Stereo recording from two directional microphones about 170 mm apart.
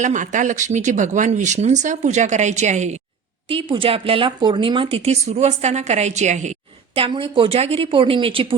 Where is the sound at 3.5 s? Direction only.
30° right (ahead or behind).